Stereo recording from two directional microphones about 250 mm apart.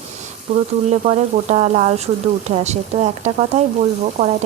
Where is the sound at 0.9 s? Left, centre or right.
Right.